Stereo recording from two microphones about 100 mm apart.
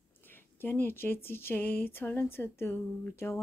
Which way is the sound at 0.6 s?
20° left (ahead or behind).